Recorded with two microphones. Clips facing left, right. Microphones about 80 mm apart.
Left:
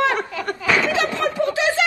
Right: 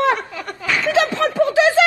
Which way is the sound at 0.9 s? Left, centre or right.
Right.